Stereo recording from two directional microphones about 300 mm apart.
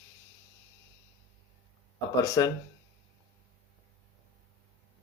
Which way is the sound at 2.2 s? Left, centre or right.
Centre.